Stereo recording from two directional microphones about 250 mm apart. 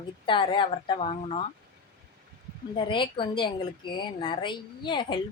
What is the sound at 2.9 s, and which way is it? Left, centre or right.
A woman's voice, centre.